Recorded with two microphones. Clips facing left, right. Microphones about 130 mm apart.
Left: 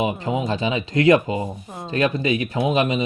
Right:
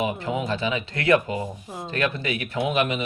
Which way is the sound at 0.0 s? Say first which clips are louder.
Left 3 dB; 15° left (ahead or behind).